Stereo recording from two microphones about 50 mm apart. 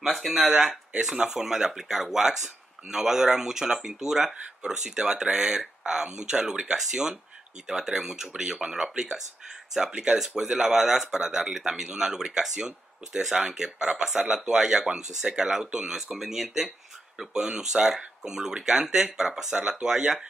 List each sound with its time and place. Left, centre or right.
0.0 s speech: centre
9.8 s speech: right
10.1 s speech: centre